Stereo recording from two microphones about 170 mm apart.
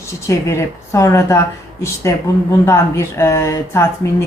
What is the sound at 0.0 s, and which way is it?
A woman's voice, 15° left (ahead or behind).